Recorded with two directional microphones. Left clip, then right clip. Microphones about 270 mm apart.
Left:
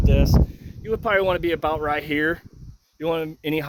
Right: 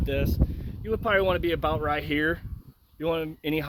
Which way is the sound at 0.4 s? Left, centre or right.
Centre.